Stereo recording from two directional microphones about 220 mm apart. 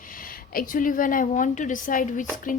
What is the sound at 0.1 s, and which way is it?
A woman's voice, 40° left (ahead or behind).